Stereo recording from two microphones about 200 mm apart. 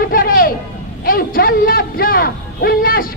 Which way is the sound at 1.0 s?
45° left (ahead or behind).